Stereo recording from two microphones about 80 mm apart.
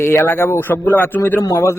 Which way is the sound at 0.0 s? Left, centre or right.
Left.